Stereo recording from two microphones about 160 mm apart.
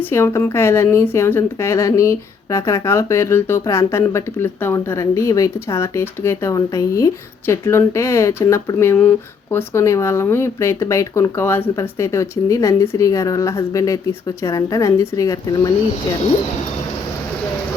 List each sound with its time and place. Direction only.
0.1 s speech: 15° left (ahead or behind)